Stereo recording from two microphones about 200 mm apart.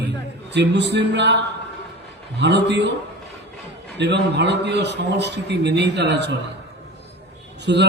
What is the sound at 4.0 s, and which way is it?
A man's voice, 60° right (ahead or behind).